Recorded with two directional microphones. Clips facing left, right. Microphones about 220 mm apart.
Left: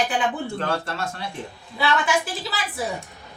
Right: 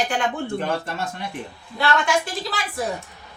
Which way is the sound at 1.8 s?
5° left (ahead or behind).